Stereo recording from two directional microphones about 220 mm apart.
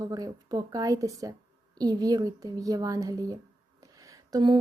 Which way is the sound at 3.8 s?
15° right (ahead or behind).